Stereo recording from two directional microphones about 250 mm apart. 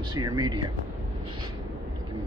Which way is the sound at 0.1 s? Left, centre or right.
Centre.